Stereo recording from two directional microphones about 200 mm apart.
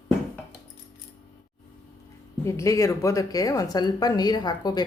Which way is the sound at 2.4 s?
15° left (ahead or behind).